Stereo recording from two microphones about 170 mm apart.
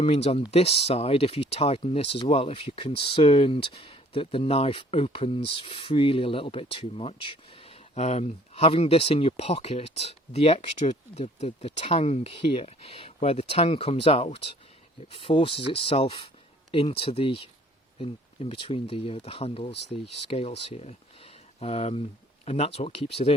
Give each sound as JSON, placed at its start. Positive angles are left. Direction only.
{"t": 0.0, "sound": "speech", "side_deg": 35}